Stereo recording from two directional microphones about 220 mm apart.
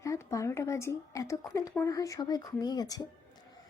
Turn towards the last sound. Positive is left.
turn(degrees=15)  # may be behind; listen again after turning